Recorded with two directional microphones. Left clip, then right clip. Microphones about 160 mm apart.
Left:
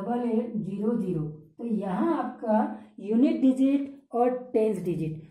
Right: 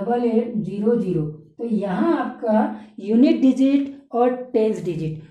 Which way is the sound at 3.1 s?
15° right (ahead or behind).